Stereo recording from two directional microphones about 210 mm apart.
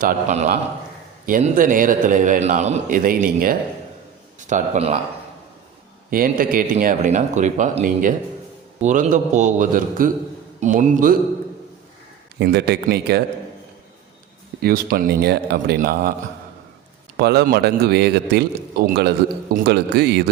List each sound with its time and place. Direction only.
0.0 s a man's voice: 35° right (ahead or behind)
6.1 s a man's voice: 45° right (ahead or behind)
12.4 s a man's voice: 50° right (ahead or behind)
14.6 s a man's voice: 45° right (ahead or behind)
17.2 s a man's voice: 50° right (ahead or behind)